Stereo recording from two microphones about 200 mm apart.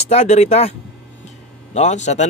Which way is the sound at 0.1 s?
35° left (ahead or behind).